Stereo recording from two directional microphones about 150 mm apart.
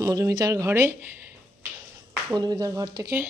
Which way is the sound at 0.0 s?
20° right (ahead or behind).